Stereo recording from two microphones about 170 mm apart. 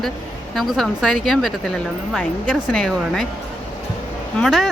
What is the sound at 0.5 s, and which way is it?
A woman's voice, centre (ahead or behind).